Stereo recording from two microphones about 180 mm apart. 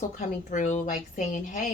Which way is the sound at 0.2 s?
45° left (ahead or behind).